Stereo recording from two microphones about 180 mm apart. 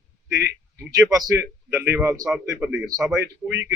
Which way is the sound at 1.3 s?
10° right (ahead or behind).